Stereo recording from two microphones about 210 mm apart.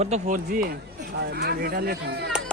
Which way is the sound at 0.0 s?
35° right (ahead or behind).